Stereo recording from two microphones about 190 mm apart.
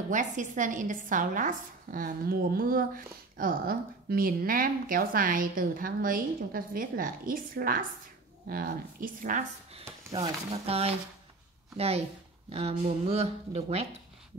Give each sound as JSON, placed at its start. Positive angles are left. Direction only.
{"t": 0.1, "sound": "speech", "side_deg": -40}